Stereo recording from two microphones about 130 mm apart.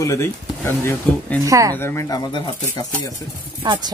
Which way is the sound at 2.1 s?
35° left (ahead or behind).